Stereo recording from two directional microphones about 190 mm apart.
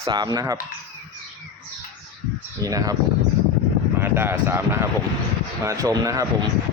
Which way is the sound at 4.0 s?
10° right (ahead or behind).